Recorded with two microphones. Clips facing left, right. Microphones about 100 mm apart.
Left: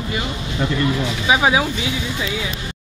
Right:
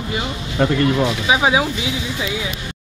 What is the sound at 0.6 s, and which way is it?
Speech, 60° right (ahead or behind).